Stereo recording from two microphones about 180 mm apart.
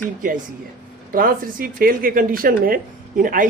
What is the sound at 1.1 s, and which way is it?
Speech, 50° right (ahead or behind).